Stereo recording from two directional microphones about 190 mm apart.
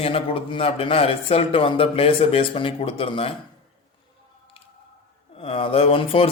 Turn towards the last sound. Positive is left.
turn(degrees=30)  # may be behind; listen again after turning